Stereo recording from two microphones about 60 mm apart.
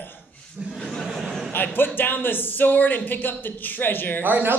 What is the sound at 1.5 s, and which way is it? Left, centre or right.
A man's voice, left.